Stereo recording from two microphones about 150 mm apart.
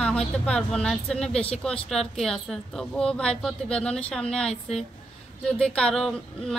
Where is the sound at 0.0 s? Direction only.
5° left (ahead or behind).